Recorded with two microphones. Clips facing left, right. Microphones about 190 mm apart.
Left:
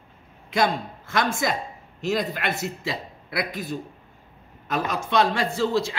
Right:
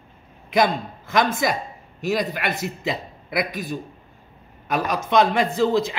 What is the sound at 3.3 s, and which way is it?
Speech, 20° right (ahead or behind).